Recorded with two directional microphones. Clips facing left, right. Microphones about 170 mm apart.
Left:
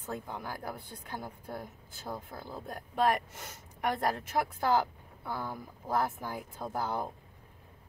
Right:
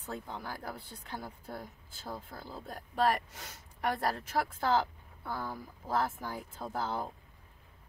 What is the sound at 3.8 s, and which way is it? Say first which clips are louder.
A woman's voice: left 1 dB; 15° left (ahead or behind).